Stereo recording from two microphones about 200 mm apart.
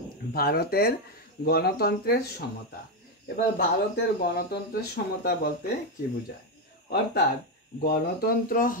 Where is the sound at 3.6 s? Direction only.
50° left (ahead or behind).